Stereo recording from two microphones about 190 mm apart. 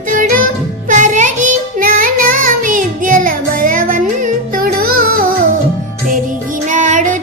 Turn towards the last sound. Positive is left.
turn(degrees=-40)  # may be behind; listen again after turning